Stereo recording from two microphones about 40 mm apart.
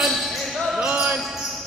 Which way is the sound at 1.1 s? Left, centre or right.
Centre.